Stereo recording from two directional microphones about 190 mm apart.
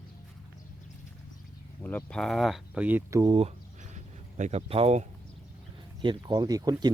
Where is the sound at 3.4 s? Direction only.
35° right (ahead or behind).